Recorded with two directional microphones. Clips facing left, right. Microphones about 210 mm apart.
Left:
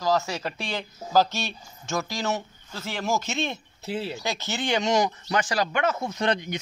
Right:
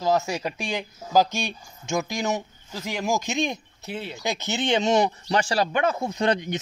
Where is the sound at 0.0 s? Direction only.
20° right (ahead or behind).